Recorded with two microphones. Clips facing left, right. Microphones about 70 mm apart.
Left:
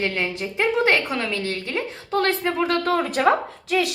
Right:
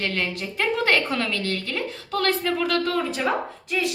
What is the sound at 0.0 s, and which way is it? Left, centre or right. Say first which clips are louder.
A woman's voice: left 2 dB; left.